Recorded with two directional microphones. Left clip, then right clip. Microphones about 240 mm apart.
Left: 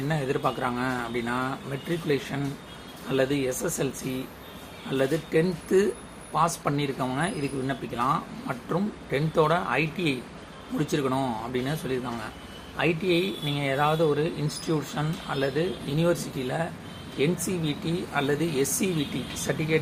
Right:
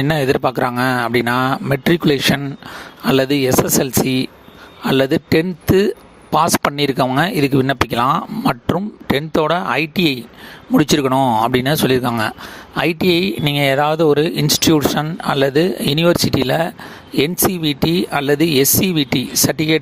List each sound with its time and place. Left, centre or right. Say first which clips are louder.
0.1 s speech: right 10 dB; right
4.9 s speech: right 11 dB; right